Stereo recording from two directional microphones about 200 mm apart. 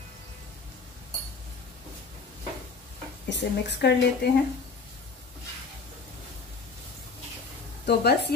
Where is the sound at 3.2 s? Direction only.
60° left (ahead or behind).